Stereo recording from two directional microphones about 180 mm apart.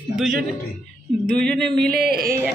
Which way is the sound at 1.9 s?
60° right (ahead or behind).